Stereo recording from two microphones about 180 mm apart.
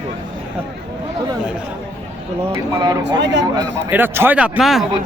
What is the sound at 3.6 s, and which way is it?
A man's voice, 10° right (ahead or behind).